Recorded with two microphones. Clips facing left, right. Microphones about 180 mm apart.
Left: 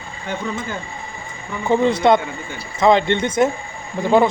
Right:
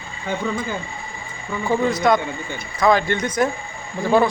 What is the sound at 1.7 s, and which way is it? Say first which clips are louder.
A man's voice: left 3 dB; 25° left (ahead or behind).